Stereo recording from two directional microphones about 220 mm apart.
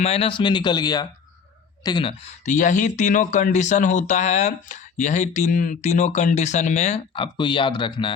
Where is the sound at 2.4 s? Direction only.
35° left (ahead or behind).